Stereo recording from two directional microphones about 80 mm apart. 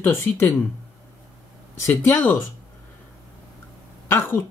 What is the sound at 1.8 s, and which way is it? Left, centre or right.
Speech, left.